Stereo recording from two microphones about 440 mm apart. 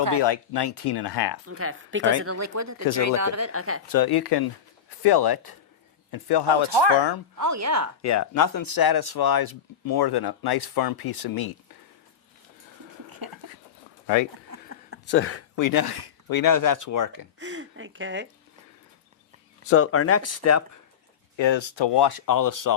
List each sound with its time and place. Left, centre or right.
0.2 s speech: left
1.5 s speech: right
3.8 s speech: left
7.3 s speech: right
8.0 s speech: left
13.1 s a sound: right
15.1 s speech: left
15.5 s speech: left
17.4 s speech: right
19.6 s speech: left
21.3 s speech: left